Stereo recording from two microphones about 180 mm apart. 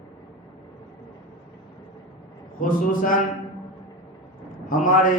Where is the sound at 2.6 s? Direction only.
50° left (ahead or behind).